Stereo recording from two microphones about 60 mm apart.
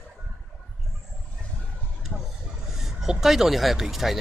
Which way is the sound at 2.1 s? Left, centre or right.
Centre.